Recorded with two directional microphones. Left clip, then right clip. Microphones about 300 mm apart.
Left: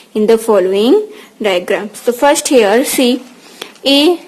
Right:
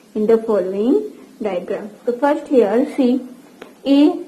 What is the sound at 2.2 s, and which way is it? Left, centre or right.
Speech, left.